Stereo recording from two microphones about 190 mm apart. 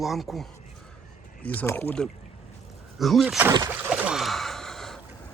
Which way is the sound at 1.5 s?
10° left (ahead or behind).